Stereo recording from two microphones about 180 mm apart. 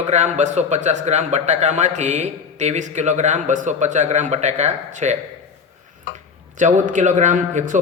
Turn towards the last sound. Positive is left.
turn(degrees=-40)  # may be behind; listen again after turning